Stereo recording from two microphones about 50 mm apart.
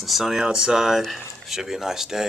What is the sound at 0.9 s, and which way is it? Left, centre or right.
Speech, centre.